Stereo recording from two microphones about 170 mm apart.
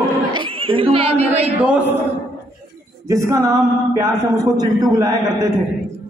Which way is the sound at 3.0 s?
15° right (ahead or behind).